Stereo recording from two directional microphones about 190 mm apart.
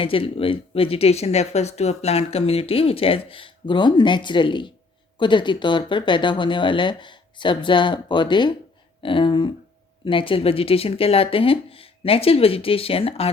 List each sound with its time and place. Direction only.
0.0 s speech: 30° left (ahead or behind)